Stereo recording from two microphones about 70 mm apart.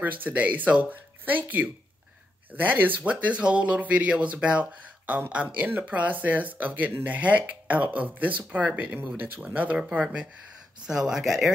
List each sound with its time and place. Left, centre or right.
0.0 s speech: right
9.8 s speech: centre